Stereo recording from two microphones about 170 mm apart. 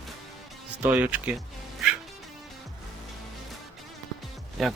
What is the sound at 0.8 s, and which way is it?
Speech, 10° right (ahead or behind).